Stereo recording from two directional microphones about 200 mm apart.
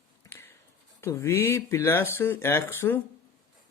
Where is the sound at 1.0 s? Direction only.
15° left (ahead or behind).